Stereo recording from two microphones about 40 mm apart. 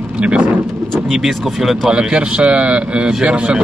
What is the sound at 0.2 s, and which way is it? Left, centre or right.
Vehicle, right.